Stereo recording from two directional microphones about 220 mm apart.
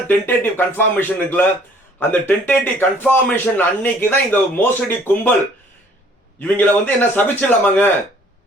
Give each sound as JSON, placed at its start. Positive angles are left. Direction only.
{"t": 0.1, "sound": "a man's voice", "side_deg": 10}
{"t": 6.4, "sound": "a man's voice", "side_deg": 10}